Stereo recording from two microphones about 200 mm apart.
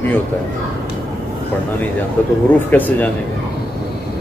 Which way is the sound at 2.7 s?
10° left (ahead or behind).